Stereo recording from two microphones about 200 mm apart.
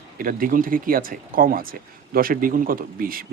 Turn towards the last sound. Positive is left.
turn(degrees=-45)  # may be behind; listen again after turning